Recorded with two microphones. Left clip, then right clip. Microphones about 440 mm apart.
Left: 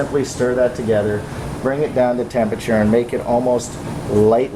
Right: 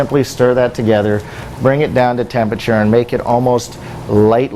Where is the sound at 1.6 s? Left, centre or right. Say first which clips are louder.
Right 5 dB; right.